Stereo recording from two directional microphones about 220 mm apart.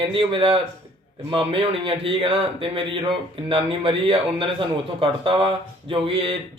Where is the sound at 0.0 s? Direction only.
25° right (ahead or behind).